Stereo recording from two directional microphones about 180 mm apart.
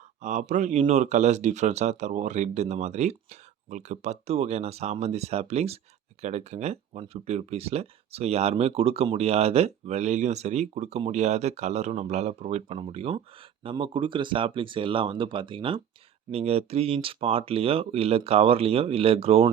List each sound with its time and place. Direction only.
0.2 s speech: 40° right (ahead or behind)